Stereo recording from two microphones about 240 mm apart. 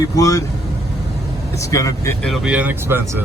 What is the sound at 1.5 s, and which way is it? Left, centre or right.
Speech, centre.